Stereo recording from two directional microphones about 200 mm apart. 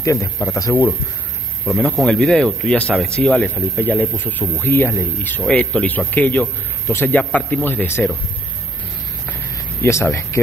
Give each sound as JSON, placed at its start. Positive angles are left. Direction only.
{"t": 0.0, "sound": "speech", "side_deg": 15}
{"t": 1.7, "sound": "speech", "side_deg": 0}
{"t": 9.3, "sound": "a sound", "side_deg": 10}